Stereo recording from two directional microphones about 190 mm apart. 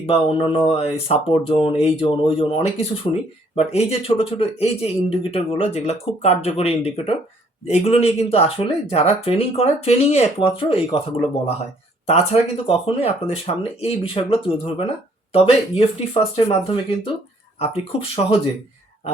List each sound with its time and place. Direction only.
0.0 s speech: 30° left (ahead or behind)